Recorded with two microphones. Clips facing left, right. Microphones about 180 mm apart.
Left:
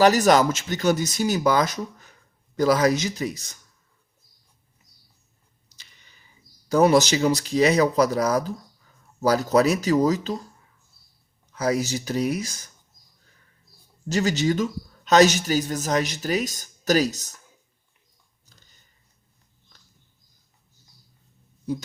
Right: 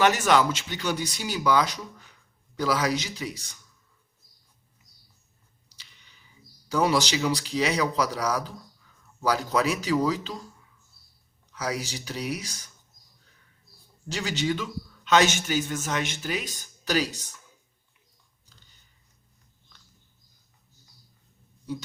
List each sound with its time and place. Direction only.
0.0 s speech: 40° left (ahead or behind)
5.7 s a sound: 45° left (ahead or behind)
6.7 s speech: 45° left (ahead or behind)
11.5 s speech: 45° left (ahead or behind)
14.1 s a man's voice: 45° left (ahead or behind)
18.4 s dog: 45° left (ahead or behind)